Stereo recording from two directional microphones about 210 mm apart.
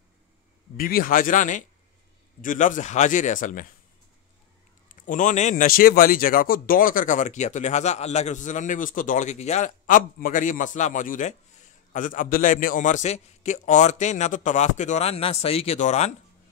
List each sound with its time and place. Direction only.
0.7 s a man's voice: 45° left (ahead or behind)
4.8 s a man's voice: 40° left (ahead or behind)